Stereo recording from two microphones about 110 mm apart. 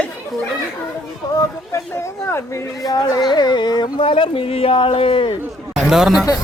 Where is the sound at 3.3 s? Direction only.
40° left (ahead or behind).